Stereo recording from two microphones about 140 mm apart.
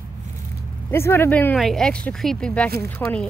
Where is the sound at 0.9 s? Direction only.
15° left (ahead or behind).